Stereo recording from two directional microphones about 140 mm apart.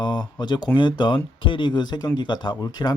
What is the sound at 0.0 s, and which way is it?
Speech, 30° left (ahead or behind).